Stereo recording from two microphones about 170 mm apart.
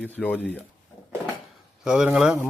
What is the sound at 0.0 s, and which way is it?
Speech, 10° left (ahead or behind).